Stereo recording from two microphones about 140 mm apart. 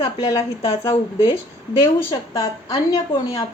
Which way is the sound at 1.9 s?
25° left (ahead or behind).